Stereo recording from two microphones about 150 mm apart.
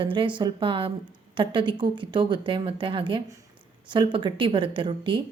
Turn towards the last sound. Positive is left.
turn(degrees=-35)  # may be behind; listen again after turning